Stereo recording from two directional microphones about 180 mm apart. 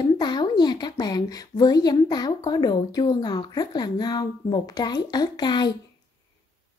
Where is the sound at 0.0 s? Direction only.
25° left (ahead or behind).